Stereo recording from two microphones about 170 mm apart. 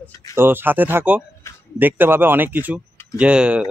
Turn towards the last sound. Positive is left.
turn(degrees=-5)  # may be behind; listen again after turning